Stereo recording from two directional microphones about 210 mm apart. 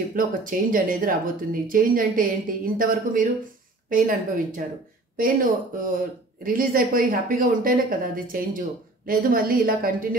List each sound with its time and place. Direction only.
0.1 s a woman's voice: 40° right (ahead or behind)